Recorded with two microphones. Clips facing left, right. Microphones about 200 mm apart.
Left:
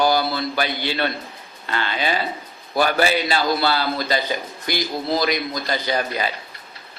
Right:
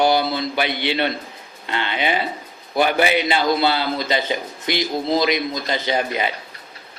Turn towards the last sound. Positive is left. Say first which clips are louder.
# right 2 dB
turn(degrees=-20)  # may be behind; listen again after turning